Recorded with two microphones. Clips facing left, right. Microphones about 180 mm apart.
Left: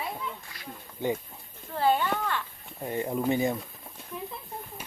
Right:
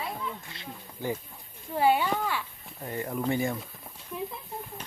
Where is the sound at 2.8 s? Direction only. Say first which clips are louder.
Left 3 dB; 20° left (ahead or behind).